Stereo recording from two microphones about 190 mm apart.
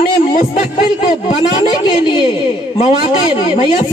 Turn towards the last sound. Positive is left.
turn(degrees=30)  # may be behind; listen again after turning